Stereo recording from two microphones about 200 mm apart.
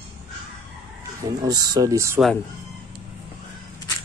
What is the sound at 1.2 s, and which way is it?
Speech, 20° right (ahead or behind).